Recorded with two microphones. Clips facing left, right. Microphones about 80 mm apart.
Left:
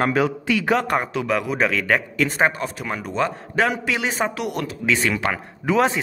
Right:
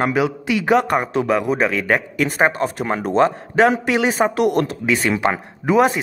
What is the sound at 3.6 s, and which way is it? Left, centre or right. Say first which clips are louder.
Speech: right 6 dB; right.